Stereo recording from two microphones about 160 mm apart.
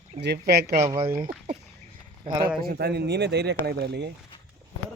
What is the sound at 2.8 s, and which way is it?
Speech, 90° right.